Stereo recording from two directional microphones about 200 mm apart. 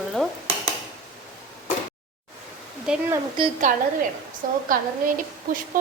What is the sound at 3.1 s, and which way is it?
Speech, 25° right (ahead or behind).